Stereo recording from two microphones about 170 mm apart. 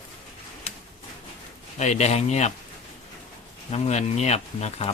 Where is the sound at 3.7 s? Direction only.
40° left (ahead or behind).